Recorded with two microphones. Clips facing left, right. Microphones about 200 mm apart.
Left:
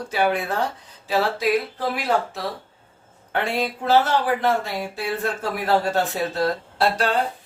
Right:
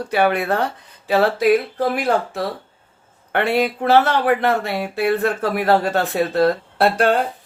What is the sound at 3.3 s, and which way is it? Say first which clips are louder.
Speech: right 6 dB; 65° right (ahead or behind).